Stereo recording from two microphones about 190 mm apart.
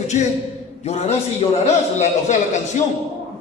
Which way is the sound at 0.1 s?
40° left (ahead or behind).